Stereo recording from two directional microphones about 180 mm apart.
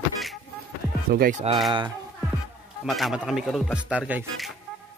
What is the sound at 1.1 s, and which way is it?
Speech, 55° right (ahead or behind).